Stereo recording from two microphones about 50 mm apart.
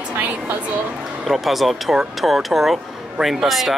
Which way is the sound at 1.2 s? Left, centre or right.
Centre.